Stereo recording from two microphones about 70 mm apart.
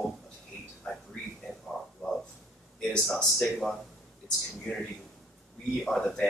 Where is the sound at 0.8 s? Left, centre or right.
Centre.